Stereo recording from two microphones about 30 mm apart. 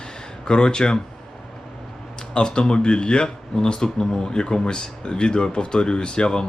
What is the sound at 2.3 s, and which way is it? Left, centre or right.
Speech, left.